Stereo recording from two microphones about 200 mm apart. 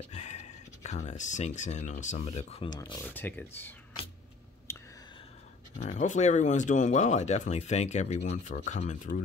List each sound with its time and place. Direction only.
0.1 s speech: 35° left (ahead or behind)
3.0 s speech: 10° left (ahead or behind)
4.7 s a sound: 15° left (ahead or behind)
5.8 s speech: 40° left (ahead or behind)